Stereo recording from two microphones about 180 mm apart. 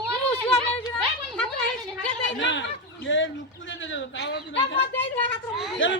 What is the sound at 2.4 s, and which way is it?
Speech, 90° left.